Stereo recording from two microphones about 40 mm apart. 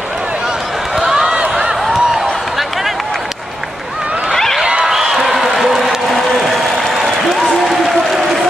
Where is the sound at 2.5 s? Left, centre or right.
Centre.